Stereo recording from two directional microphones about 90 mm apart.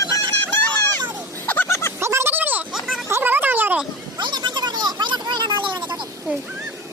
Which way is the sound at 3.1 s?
25° right (ahead or behind).